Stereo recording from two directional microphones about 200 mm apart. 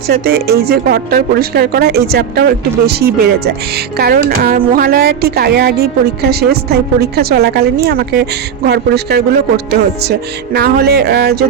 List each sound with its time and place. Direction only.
0.1 s a woman's voice: 50° right (ahead or behind)